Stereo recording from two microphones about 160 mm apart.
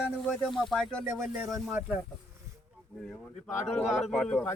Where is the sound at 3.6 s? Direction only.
Centre (ahead or behind).